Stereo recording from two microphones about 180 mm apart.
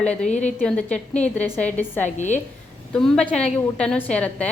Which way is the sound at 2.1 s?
40° left (ahead or behind).